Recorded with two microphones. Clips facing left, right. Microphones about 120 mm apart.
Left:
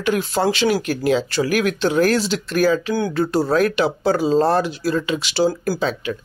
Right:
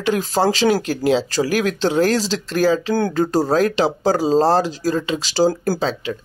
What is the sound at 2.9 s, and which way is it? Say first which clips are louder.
Speech: right 1 dB; 45° right (ahead or behind).